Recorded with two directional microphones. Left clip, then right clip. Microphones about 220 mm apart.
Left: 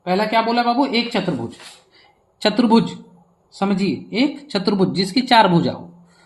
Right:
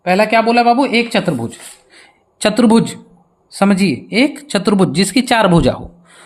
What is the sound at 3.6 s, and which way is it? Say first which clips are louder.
Speech: right 7 dB; 50° right (ahead or behind).